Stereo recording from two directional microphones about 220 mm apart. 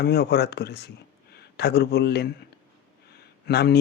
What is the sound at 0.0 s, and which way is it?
A man's voice, 50° left (ahead or behind).